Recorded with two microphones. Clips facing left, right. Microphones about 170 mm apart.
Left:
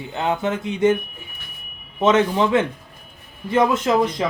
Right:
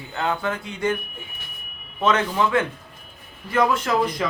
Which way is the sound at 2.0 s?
20° left (ahead or behind).